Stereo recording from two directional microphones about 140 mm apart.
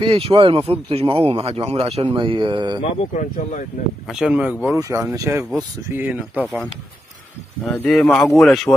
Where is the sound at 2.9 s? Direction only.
55° left (ahead or behind).